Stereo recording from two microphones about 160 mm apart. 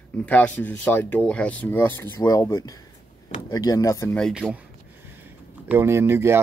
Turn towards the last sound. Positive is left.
turn(degrees=-15)  # may be behind; listen again after turning